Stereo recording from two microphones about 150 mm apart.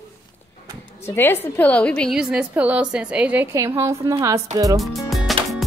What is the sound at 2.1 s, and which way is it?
A woman's voice, 5° right (ahead or behind).